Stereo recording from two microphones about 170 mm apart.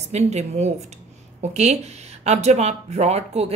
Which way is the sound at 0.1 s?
40° right (ahead or behind).